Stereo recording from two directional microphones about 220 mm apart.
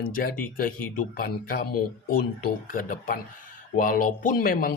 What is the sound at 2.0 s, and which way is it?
Speech, 40° left (ahead or behind).